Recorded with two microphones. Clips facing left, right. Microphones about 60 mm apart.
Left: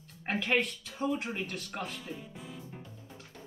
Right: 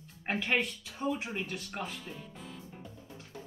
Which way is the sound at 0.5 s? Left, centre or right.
Centre.